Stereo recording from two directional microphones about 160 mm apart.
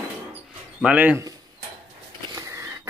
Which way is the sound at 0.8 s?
10° right (ahead or behind).